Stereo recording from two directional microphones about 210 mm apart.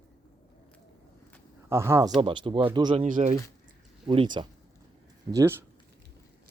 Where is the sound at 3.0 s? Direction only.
40° right (ahead or behind).